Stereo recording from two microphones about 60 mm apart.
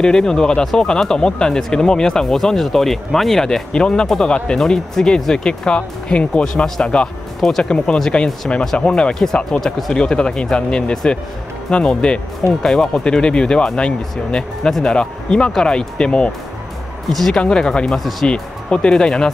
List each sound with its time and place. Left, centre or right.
0.0 s speech: centre
17.1 s speech: centre
17.4 s speech: centre